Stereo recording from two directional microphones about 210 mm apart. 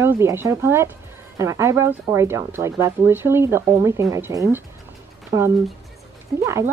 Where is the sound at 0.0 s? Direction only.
10° right (ahead or behind).